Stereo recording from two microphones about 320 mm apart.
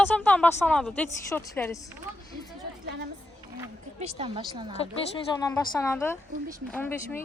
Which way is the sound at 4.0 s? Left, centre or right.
Centre.